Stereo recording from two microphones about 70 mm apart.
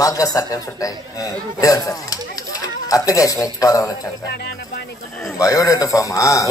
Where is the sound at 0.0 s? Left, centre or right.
Left.